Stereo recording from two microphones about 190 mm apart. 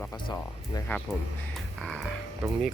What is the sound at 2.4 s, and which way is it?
Speech, 10° right (ahead or behind).